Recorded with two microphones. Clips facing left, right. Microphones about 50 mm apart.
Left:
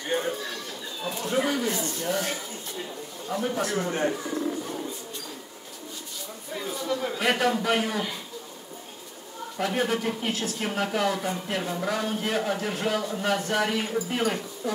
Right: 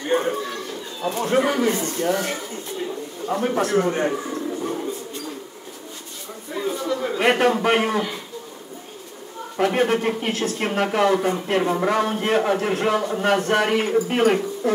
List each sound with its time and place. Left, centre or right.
0.1 s a sound: right
1.0 s speech: right
6.5 s speech: right
7.2 s speech: right
9.6 s speech: right